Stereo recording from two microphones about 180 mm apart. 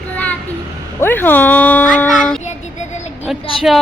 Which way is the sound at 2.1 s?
5° left (ahead or behind).